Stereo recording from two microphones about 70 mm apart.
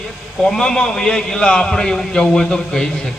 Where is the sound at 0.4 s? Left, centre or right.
Centre.